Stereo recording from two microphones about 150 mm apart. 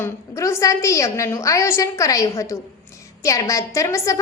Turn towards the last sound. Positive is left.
turn(degrees=20)  # may be behind; listen again after turning